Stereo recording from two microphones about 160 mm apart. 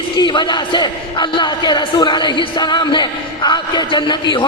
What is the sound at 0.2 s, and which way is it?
Speech, 30° left (ahead or behind).